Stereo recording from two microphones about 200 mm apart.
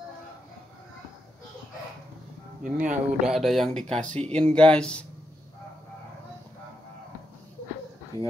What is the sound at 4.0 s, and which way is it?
Speech, 5° left (ahead or behind).